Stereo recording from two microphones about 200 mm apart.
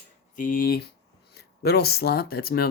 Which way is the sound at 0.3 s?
45° left (ahead or behind).